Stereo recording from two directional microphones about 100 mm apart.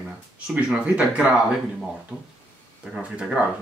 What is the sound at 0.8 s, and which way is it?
Speech, 15° right (ahead or behind).